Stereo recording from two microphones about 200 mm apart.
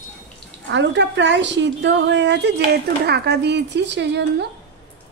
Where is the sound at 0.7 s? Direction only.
60° right (ahead or behind).